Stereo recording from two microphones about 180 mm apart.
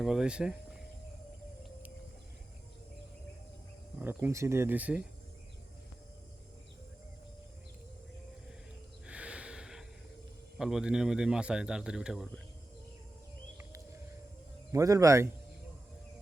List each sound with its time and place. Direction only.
0.0 s speech: 5° right (ahead or behind)
4.0 s speech: 10° right (ahead or behind)
9.0 s snort: 5° right (ahead or behind)
10.6 s speech: 5° right (ahead or behind)
14.7 s speech: 15° right (ahead or behind)